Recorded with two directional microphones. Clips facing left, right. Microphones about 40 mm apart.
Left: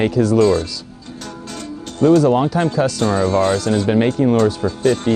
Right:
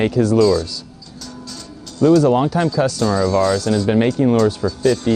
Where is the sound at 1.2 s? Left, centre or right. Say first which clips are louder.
Left 3 dB; left.